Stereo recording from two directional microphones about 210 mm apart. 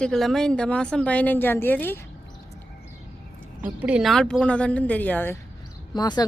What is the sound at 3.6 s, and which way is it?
A woman's voice, 5° right (ahead or behind).